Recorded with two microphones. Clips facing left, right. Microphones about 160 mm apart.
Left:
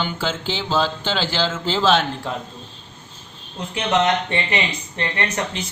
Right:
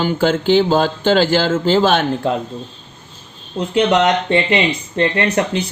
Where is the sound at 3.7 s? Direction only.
25° right (ahead or behind).